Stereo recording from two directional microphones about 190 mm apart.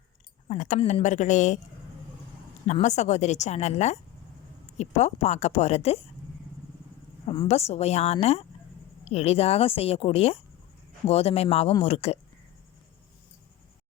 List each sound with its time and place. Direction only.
0.4 s a woman's voice: 40° left (ahead or behind)
2.6 s a woman's voice: 35° left (ahead or behind)
7.3 s a woman's voice: 30° left (ahead or behind)